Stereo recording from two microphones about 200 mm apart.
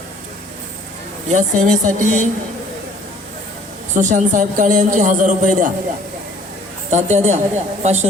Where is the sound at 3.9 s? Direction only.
40° right (ahead or behind).